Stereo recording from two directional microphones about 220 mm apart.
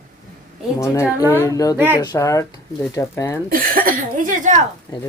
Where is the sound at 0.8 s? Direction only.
15° left (ahead or behind).